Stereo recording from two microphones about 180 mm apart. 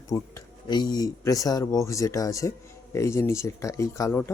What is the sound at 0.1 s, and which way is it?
Speech, 20° left (ahead or behind).